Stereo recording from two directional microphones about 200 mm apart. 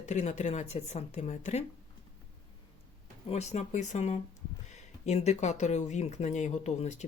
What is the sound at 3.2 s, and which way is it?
Speech, 35° left (ahead or behind).